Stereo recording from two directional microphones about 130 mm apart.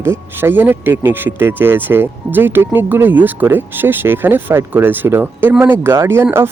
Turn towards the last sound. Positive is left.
turn(degrees=-20)  # may be behind; listen again after turning